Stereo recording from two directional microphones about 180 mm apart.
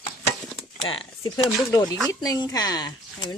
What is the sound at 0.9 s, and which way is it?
Speech, 20° left (ahead or behind).